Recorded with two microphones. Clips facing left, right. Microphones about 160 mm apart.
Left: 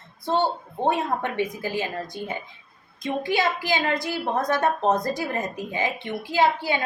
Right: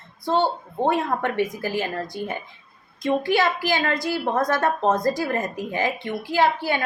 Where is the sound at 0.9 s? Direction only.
20° left (ahead or behind).